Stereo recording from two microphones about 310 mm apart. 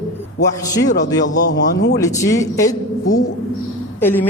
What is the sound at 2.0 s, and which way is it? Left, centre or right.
Speech, centre.